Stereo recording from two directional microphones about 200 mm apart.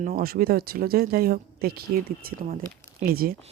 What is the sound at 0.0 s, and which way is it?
Speech, 45° right (ahead or behind).